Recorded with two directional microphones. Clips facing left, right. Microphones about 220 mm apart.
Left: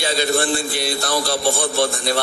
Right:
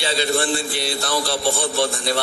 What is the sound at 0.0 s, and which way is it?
A man's voice, 45° left (ahead or behind).